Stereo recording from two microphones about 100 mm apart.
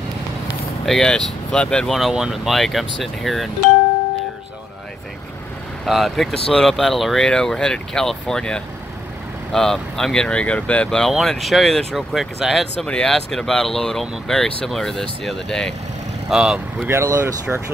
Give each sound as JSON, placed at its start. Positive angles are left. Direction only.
{"t": 0.8, "sound": "speech", "side_deg": 5}
{"t": 5.9, "sound": "speech", "side_deg": 0}
{"t": 16.3, "sound": "speech", "side_deg": -5}
{"t": 16.8, "sound": "speech", "side_deg": -25}